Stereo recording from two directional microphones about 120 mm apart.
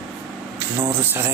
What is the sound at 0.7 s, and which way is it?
Speech, 15° right (ahead or behind).